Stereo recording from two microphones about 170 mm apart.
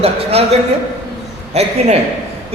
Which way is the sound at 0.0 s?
35° right (ahead or behind).